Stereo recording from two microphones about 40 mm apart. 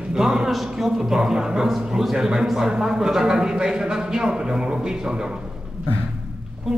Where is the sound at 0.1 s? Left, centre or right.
Centre.